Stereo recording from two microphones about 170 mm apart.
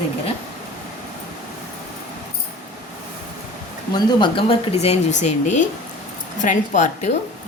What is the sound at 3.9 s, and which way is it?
Speech, 25° left (ahead or behind).